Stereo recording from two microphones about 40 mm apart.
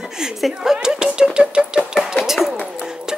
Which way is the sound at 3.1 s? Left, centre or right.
Centre.